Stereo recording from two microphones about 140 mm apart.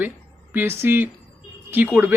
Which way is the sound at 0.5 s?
15° right (ahead or behind).